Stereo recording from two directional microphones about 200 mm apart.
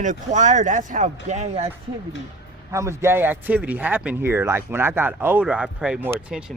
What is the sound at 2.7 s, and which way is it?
A man's voice, 15° right (ahead or behind).